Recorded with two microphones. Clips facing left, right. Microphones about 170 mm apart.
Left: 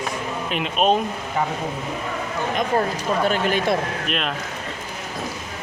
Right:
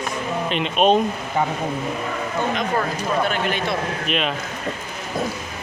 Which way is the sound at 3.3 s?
40° left (ahead or behind).